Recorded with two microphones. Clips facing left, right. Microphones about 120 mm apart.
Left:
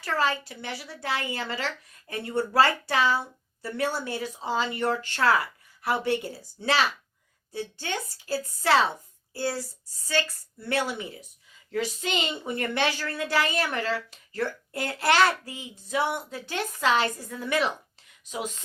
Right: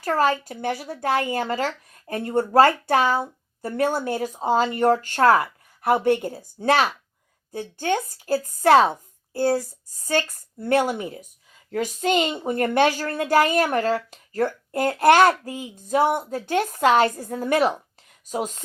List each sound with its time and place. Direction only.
0.0 s speech: 45° right (ahead or behind)